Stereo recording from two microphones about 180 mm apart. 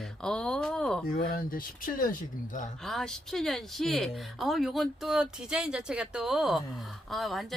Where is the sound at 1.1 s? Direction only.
55° left (ahead or behind).